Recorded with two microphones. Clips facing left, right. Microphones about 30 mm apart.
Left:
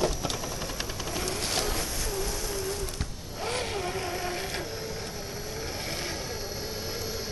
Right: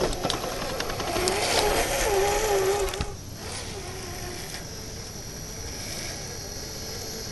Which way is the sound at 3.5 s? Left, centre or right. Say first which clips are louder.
Left 7 dB; left.